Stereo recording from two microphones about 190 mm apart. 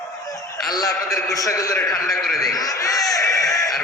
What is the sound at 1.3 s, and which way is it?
Speech, 15° left (ahead or behind).